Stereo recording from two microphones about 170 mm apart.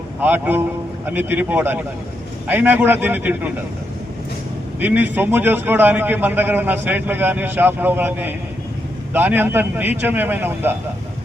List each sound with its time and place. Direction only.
0.2 s a man's voice: 10° right (ahead or behind)
4.8 s a man's voice: 10° right (ahead or behind)